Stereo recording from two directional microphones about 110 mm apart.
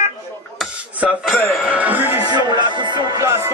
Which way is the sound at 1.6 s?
15° right (ahead or behind).